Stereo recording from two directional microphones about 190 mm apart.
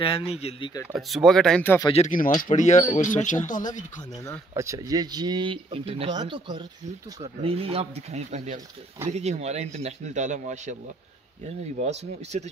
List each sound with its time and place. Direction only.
0.0 s speech: 30° left (ahead or behind)
0.9 s speech: centre (ahead or behind)
2.0 s speech: 45° left (ahead or behind)
4.6 s speech: 15° right (ahead or behind); by 12.4 s 35° right (ahead or behind)